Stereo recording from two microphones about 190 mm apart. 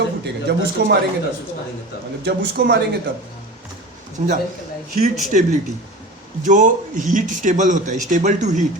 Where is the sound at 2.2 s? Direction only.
60° right (ahead or behind).